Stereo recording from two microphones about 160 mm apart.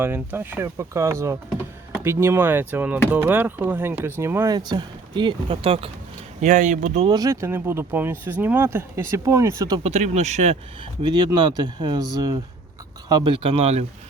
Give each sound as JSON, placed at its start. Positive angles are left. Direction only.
{"t": 0.0, "sound": "speech", "side_deg": -10}
{"t": 4.5, "sound": "speech", "side_deg": -25}
{"t": 6.4, "sound": "speech", "side_deg": -50}
{"t": 7.1, "sound": "speech", "side_deg": -20}
{"t": 9.8, "sound": "speech", "side_deg": -45}
{"t": 11.0, "sound": "speech", "side_deg": -25}